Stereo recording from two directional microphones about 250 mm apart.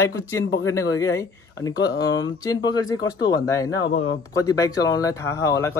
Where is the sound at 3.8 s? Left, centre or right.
Left.